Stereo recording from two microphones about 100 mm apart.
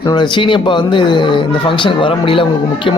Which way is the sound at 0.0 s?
50° left (ahead or behind).